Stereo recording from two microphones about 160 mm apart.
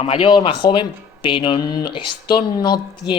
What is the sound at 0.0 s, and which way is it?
Speech, 35° left (ahead or behind).